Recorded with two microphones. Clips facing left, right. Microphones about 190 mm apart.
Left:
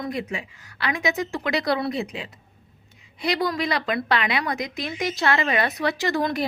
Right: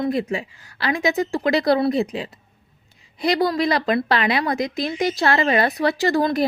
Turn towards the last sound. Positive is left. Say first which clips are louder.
# right 5 dB
turn(degrees=-35)  # may be behind; listen again after turning